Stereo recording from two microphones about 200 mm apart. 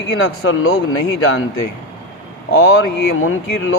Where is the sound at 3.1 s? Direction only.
90° left.